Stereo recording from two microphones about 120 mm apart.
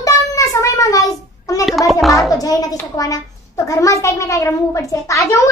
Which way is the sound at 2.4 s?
30° left (ahead or behind).